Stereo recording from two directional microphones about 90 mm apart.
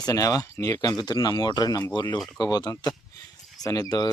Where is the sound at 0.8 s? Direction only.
50° left (ahead or behind).